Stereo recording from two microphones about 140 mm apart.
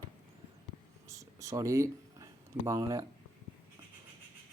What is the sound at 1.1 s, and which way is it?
Speech, 25° right (ahead or behind).